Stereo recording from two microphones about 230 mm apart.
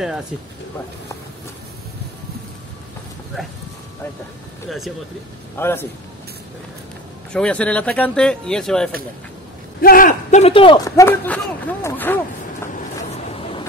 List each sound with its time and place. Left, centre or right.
4.6 s speech: centre
5.6 s speech: centre
7.3 s speech: centre
9.8 s a man's voice: left; by 12.2 s centre